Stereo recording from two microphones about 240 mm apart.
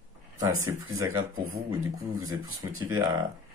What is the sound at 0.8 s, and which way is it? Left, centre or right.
Speech, right.